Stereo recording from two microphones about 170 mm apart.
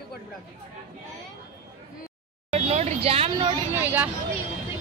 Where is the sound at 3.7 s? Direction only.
10° right (ahead or behind).